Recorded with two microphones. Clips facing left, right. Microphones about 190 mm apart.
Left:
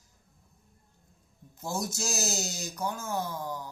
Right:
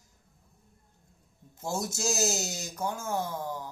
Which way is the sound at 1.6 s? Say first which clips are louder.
Right 1 dB; 25° right (ahead or behind).